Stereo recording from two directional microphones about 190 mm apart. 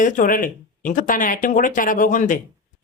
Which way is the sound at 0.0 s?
45° left (ahead or behind).